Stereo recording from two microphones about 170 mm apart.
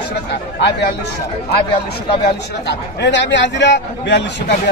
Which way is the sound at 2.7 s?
90° left.